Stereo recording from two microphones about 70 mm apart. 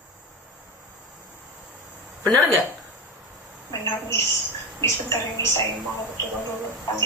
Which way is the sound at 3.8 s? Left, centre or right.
Left.